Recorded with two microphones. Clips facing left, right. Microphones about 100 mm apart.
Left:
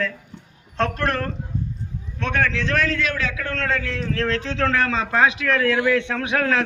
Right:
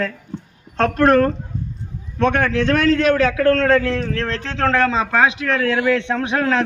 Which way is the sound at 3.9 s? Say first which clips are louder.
Right 1 dB; 40° right (ahead or behind).